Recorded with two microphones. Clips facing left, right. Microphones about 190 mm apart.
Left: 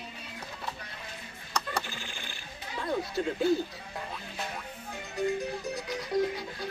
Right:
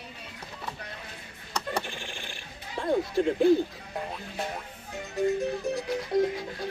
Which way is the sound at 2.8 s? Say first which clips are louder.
Right 5 dB; 25° right (ahead or behind).